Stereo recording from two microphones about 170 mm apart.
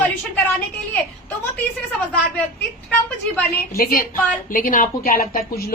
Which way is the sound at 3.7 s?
60° left (ahead or behind).